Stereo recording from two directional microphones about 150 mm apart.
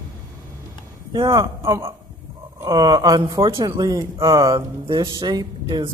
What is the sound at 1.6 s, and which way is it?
Speech, 20° right (ahead or behind).